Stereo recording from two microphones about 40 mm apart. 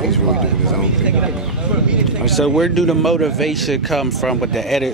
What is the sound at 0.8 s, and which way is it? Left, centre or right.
Speech, right.